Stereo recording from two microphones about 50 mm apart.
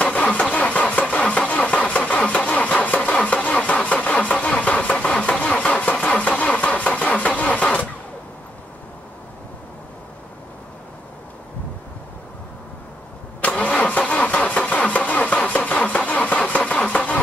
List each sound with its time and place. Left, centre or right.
0.0 s engine starting: left
3.4 s vehicle: left
5.4 s engine starting: left
13.4 s vehicle: left
14.7 s engine starting: left
16.4 s vehicle: left